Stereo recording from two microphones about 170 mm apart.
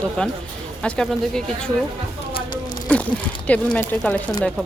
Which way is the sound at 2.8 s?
10° left (ahead or behind).